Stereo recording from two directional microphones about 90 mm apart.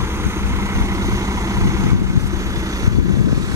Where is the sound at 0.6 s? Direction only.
35° right (ahead or behind).